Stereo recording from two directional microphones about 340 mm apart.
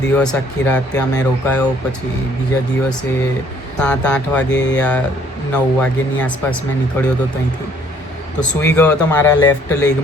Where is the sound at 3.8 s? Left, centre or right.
Centre.